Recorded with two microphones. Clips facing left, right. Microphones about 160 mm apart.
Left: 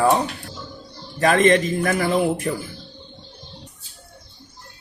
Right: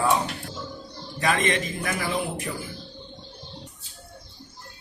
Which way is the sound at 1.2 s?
50° left (ahead or behind).